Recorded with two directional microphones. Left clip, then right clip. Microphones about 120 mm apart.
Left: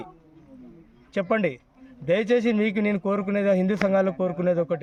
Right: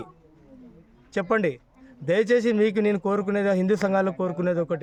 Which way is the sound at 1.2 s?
45° right (ahead or behind).